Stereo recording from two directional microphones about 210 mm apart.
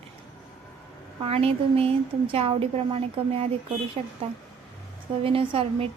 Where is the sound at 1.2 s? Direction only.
25° right (ahead or behind).